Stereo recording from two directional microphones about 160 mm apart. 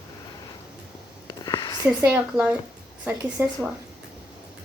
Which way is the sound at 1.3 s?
25° left (ahead or behind).